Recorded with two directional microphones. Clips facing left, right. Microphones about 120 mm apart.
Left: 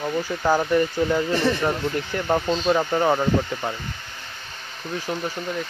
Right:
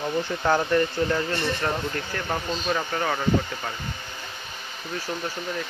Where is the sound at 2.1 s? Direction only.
25° left (ahead or behind).